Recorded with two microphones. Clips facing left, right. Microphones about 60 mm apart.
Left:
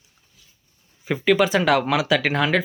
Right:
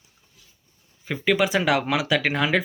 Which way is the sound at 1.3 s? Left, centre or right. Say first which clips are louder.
Left 3 dB; centre.